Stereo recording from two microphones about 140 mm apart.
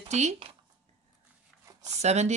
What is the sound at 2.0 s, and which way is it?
Speech, 55° right (ahead or behind).